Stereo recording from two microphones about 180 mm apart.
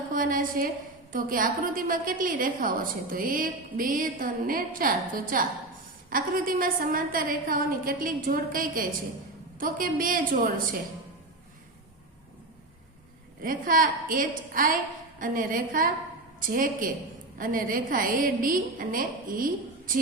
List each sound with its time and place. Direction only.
0.1 s a woman's voice: 50° right (ahead or behind)
13.4 s a woman's voice: 50° right (ahead or behind)